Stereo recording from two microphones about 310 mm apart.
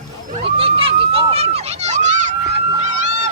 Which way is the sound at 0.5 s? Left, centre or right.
Centre.